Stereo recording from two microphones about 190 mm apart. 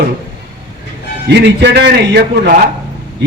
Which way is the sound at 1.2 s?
60° right (ahead or behind).